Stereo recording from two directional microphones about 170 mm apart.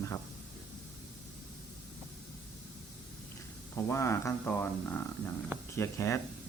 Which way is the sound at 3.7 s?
15° left (ahead or behind).